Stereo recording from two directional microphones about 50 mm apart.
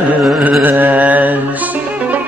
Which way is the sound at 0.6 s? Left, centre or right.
Right.